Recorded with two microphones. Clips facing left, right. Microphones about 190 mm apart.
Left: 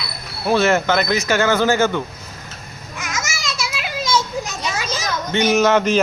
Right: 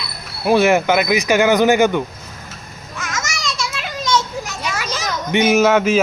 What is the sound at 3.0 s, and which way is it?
Children playing, 10° left (ahead or behind).